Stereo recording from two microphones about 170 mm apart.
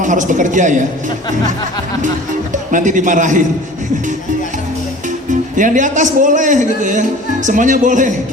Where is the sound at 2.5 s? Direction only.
50° right (ahead or behind).